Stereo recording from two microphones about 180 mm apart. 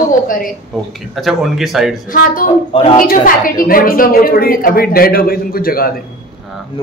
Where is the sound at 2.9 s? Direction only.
50° left (ahead or behind).